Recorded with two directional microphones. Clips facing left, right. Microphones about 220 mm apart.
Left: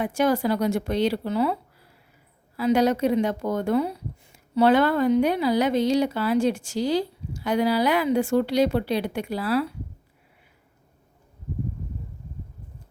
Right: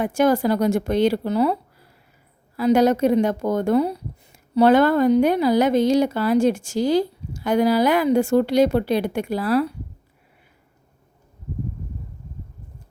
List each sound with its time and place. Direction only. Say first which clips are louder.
0.0 s speech: right 4 dB; 45° right (ahead or behind)
2.6 s speech: right 4 dB; 45° right (ahead or behind)